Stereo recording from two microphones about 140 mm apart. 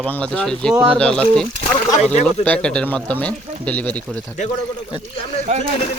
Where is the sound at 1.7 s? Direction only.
65° left (ahead or behind).